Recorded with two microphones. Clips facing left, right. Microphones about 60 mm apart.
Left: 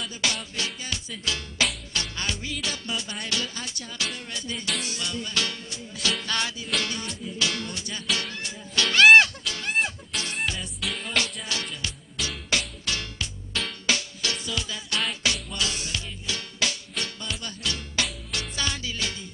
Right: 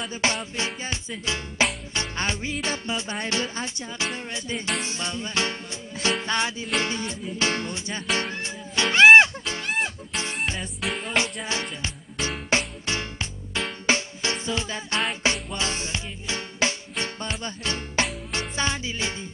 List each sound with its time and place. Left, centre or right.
0.0 s music: right
10.9 s music: centre
11.8 s music: right
13.5 s music: centre
13.8 s music: right